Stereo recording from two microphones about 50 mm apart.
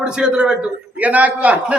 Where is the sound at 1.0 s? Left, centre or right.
Right.